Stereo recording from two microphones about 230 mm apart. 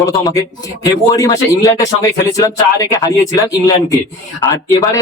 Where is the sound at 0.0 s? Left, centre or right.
Centre.